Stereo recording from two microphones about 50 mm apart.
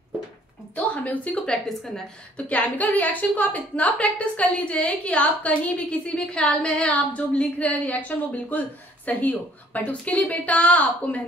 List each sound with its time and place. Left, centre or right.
0.7 s a woman's voice: left